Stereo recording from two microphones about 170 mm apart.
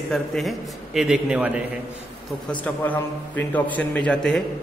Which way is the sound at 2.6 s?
10° left (ahead or behind).